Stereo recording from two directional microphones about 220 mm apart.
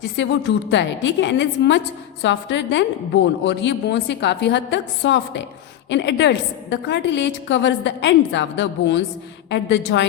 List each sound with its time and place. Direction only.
0.2 s a woman's voice: 55° left (ahead or behind)